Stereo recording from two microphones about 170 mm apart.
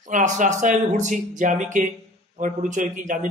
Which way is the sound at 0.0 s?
45° right (ahead or behind).